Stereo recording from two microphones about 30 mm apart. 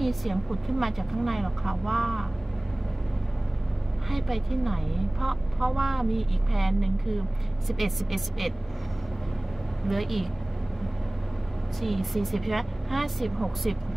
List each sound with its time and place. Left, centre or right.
0.0 s a woman's voice: centre
4.1 s a woman's voice: centre
9.8 s a woman's voice: centre
11.8 s a woman's voice: centre